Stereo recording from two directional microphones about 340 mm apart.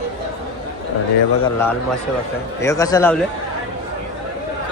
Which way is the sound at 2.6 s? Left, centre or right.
Centre.